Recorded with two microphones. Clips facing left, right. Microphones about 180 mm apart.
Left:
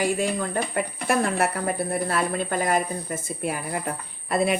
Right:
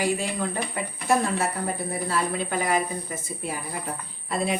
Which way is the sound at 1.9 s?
55° left (ahead or behind).